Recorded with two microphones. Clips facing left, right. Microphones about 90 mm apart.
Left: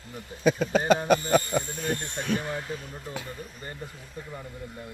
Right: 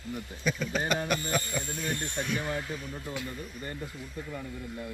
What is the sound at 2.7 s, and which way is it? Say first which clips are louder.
Speech: left 1 dB; 40° left (ahead or behind).